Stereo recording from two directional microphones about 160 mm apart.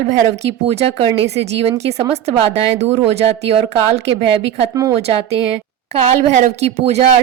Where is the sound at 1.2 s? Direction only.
40° right (ahead or behind).